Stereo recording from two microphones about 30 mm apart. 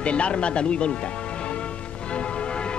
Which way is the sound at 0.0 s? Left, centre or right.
Left.